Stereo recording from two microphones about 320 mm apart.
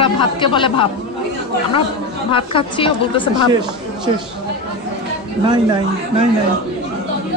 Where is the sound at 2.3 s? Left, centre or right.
Centre.